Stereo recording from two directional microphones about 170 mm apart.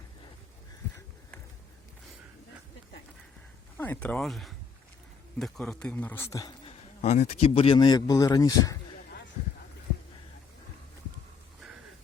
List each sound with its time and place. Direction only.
3.8 s a man's voice: 10° left (ahead or behind)
6.7 s speech: 40° left (ahead or behind); by 8.8 s 20° left (ahead or behind)